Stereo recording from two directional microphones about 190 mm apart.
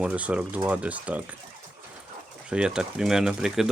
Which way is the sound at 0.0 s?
5° right (ahead or behind).